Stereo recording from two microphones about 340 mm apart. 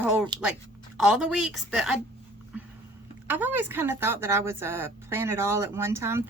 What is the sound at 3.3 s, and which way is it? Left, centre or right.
Speech, centre.